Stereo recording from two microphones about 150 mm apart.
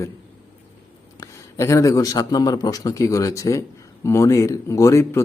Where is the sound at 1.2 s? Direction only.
20° left (ahead or behind).